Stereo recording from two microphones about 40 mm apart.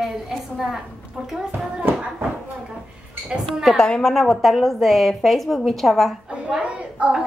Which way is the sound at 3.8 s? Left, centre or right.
Centre.